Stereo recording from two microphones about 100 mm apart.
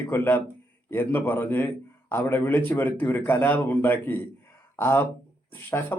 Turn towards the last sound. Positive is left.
turn(degrees=20)  # may be behind; listen again after turning